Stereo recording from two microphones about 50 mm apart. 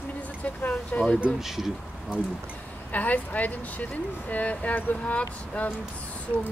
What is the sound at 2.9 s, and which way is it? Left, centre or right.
Speech, left.